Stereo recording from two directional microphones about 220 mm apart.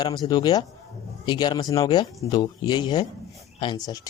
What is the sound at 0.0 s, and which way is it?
A man's voice, 20° left (ahead or behind).